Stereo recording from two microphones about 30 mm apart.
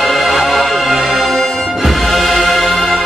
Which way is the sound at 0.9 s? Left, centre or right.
Centre.